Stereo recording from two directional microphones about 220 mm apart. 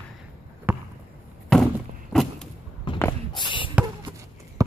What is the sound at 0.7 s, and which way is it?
Basketball bounce, 10° right (ahead or behind).